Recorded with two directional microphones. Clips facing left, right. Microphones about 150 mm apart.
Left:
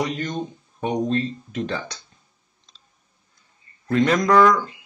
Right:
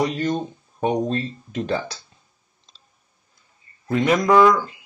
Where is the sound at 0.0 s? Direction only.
30° right (ahead or behind).